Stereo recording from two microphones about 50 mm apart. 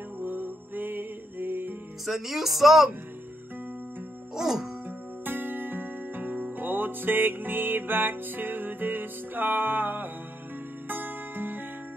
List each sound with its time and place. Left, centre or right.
0.2 s music: right
2.0 s speech: centre
4.4 s music: centre
5.2 s music: right